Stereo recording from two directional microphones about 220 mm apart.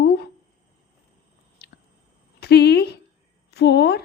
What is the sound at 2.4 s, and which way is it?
A woman's voice, 45° left (ahead or behind).